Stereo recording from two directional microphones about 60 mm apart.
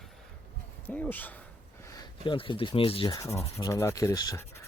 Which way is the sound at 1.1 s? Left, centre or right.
Left.